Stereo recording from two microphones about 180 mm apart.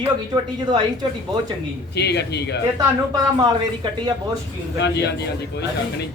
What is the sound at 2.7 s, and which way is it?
Speech, 20° right (ahead or behind).